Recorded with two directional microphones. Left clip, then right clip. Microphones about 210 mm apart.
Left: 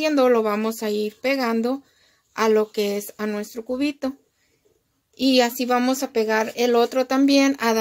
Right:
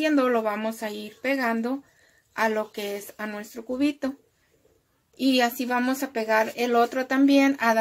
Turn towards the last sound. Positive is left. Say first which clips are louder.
# left 2 dB
turn(degrees=45)  # may be behind; listen again after turning